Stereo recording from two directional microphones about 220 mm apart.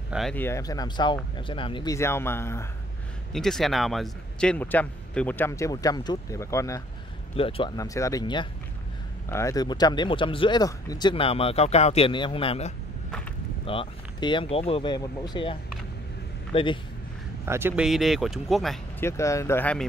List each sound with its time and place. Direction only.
0.1 s a man's voice: centre (ahead or behind)
7.3 s speech: 25° left (ahead or behind)
16.5 s speech: 25° left (ahead or behind)
17.5 s speech: 10° right (ahead or behind)
19.0 s a man's voice: 15° left (ahead or behind)